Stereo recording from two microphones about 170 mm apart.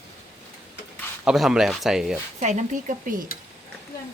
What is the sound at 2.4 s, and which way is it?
Speech, 45° right (ahead or behind).